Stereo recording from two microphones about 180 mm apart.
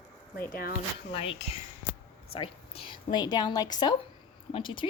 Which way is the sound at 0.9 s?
30° left (ahead or behind).